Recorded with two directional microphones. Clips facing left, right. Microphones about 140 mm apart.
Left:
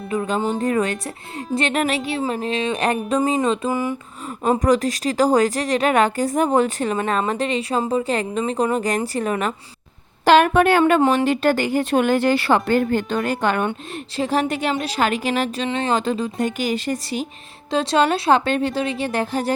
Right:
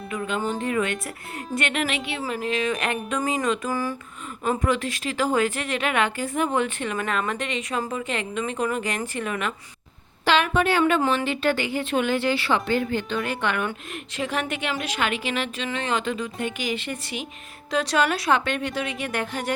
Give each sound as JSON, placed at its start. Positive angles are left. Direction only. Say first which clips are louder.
{"t": 0.1, "sound": "music", "louder": "left 5 dB", "side_deg": 30}
{"t": 0.6, "sound": "a woman's voice", "louder": "left 5 dB", "side_deg": 40}
{"t": 2.3, "sound": "music", "louder": "left 3 dB", "side_deg": 30}
{"t": 4.4, "sound": "a woman's voice", "louder": "left 7 dB", "side_deg": 40}
{"t": 11.0, "sound": "a woman's voice", "louder": "left 6 dB", "side_deg": 40}
{"t": 17.7, "sound": "a woman's voice", "louder": "left 5 dB", "side_deg": 25}